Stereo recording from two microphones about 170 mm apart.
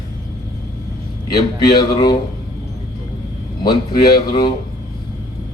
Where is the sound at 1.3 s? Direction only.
70° left (ahead or behind).